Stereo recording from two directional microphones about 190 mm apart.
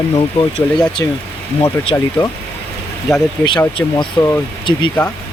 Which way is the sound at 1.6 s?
20° left (ahead or behind).